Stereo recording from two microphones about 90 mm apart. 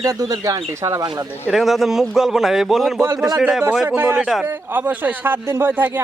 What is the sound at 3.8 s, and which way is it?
A man's voice, 25° right (ahead or behind).